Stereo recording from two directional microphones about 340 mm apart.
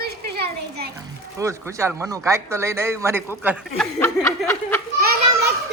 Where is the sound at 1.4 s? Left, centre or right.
Centre.